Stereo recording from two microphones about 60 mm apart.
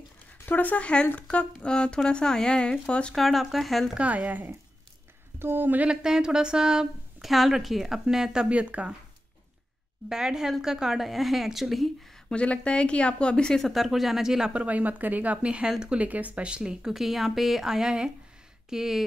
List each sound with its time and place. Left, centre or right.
0.5 s speech: left
3.2 s speech: centre
4.0 s speech: right
5.9 s a woman's voice: centre
10.0 s a woman's voice: centre
12.3 s speech: centre
13.6 s speech: centre
14.5 s a woman's voice: right
16.9 s a woman's voice: centre